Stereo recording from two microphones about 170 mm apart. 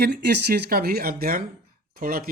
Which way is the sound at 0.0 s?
75° right (ahead or behind).